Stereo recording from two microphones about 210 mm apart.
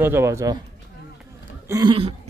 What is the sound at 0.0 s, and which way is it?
Speech, 10° right (ahead or behind).